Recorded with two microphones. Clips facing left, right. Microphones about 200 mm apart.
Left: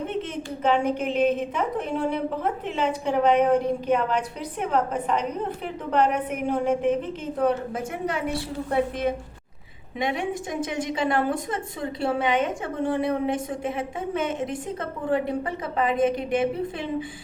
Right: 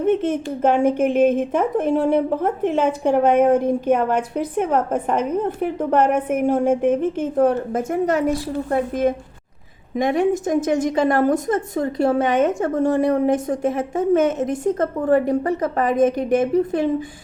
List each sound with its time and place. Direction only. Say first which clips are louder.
0.0 s a woman's voice: right 10 dB; 50° right (ahead or behind)